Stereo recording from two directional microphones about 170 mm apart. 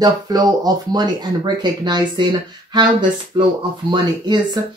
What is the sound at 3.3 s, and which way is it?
Speech, 30° right (ahead or behind).